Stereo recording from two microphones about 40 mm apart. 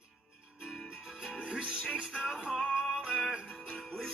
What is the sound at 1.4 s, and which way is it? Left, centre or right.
Music, right.